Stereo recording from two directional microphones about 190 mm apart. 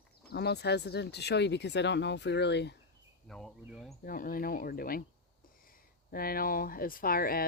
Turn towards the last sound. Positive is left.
turn(degrees=50)  # may be behind; listen again after turning